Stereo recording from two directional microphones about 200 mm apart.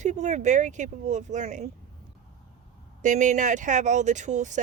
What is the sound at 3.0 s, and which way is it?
Speech, 40° right (ahead or behind).